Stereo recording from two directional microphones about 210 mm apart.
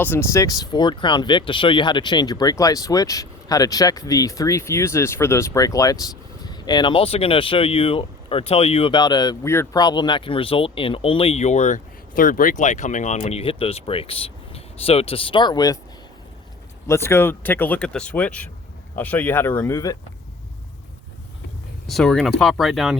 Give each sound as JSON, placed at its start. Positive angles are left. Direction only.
{"t": 0.0, "sound": "speech", "side_deg": 10}
{"t": 16.8, "sound": "speech", "side_deg": 10}
{"t": 21.8, "sound": "speech", "side_deg": 0}